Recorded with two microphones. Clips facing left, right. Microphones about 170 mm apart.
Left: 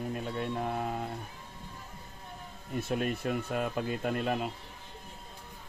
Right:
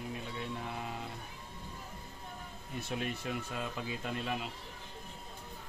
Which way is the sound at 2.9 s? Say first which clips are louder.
Left 6 dB; 55° left (ahead or behind).